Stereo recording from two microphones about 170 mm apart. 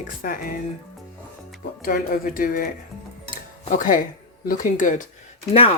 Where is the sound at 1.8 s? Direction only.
55° left (ahead or behind).